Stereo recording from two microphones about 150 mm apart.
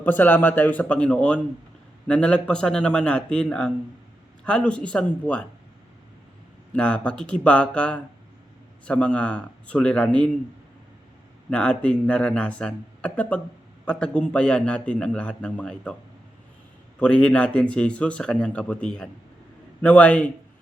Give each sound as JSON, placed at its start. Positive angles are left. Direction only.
{"t": 0.0, "sound": "a man's voice", "side_deg": 10}
{"t": 6.7, "sound": "a man's voice", "side_deg": 5}
{"t": 11.5, "sound": "a man's voice", "side_deg": 5}
{"t": 17.0, "sound": "a man's voice", "side_deg": 5}